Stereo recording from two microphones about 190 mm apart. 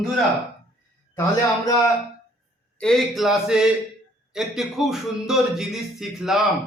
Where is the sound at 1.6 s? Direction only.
15° left (ahead or behind).